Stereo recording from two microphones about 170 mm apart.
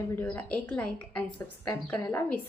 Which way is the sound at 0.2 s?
10° left (ahead or behind).